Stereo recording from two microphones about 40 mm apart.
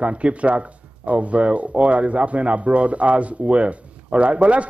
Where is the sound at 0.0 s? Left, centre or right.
Right.